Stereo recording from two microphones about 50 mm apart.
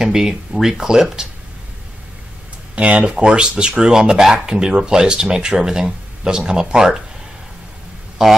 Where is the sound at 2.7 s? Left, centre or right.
Right.